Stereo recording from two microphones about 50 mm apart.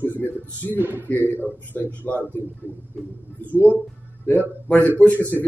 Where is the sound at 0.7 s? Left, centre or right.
Right.